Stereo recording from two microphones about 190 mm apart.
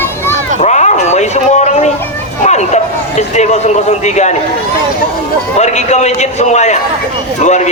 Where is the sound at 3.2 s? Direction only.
35° left (ahead or behind).